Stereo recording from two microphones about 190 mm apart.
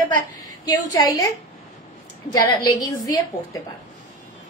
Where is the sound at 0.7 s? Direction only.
20° left (ahead or behind).